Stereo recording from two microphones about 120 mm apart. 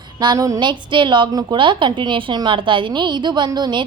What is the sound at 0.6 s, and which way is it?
A woman's voice, 40° right (ahead or behind).